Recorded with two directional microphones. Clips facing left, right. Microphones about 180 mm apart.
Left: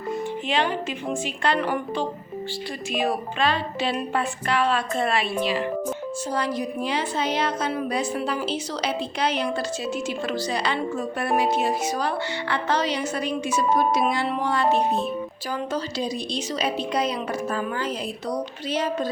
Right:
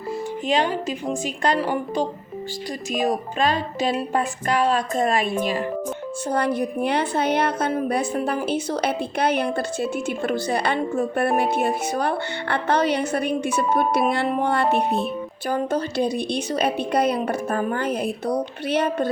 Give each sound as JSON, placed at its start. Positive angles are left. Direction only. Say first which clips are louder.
{"t": 0.4, "sound": "speech", "louder": "right 4 dB", "side_deg": -40}
{"t": 2.9, "sound": "speech", "louder": "right 2 dB", "side_deg": -40}
{"t": 6.3, "sound": "a woman's voice", "louder": "right 5 dB", "side_deg": -55}